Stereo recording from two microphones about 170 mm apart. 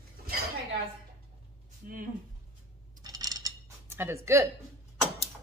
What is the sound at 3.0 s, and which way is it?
Cutlery, 20° right (ahead or behind).